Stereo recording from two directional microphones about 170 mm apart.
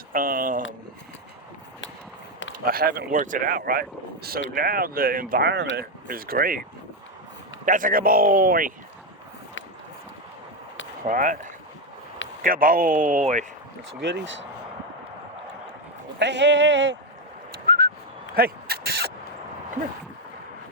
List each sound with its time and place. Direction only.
0.1 s speech: 55° right (ahead or behind)
2.6 s speech: 60° right (ahead or behind)
7.6 s speech: 50° right (ahead or behind)
11.0 s speech: 50° right (ahead or behind)
12.4 s speech: 55° right (ahead or behind)
14.0 s speech: 90° right
16.1 s speech: 90° right
17.7 s a sound: 65° right (ahead or behind)